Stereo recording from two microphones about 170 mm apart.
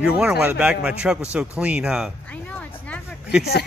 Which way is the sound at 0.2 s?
5° right (ahead or behind).